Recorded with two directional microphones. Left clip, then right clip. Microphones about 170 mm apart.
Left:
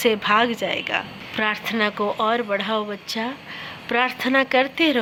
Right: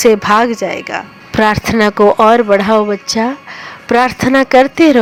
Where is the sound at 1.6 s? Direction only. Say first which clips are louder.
Right 13 dB; 50° right (ahead or behind).